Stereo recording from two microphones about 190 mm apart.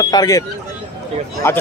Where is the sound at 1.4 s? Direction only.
10° left (ahead or behind).